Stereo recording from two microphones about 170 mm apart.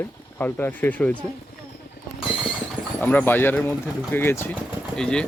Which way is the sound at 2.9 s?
10° left (ahead or behind).